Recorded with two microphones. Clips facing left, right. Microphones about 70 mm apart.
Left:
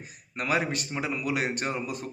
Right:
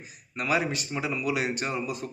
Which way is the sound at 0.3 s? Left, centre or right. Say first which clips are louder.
Right 1 dB; left.